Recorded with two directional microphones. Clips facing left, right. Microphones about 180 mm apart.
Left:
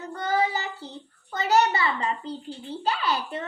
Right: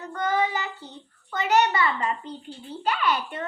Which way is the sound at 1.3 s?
35° left (ahead or behind).